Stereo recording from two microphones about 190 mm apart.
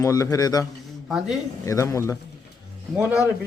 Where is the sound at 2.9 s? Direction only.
5° right (ahead or behind).